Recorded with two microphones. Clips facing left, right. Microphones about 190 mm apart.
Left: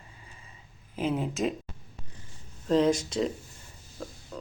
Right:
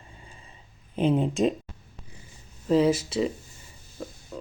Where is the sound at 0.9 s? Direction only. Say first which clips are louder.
Right 6 dB; 30° right (ahead or behind).